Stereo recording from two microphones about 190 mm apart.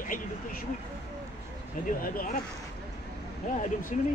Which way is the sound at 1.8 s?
45° left (ahead or behind).